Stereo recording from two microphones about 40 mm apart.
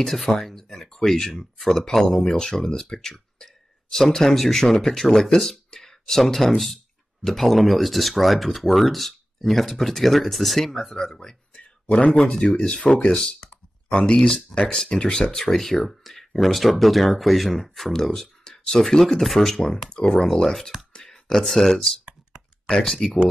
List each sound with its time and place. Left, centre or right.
0.0 s speech: centre
0.4 s a sound: centre
1.4 s speech: centre
11.9 s speech: left
12.3 s speech: centre
19.9 s speech: left
21.1 s speech: centre
23.0 s speech: centre